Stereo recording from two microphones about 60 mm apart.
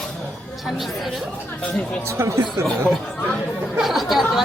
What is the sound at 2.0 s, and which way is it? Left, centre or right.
Speech, right.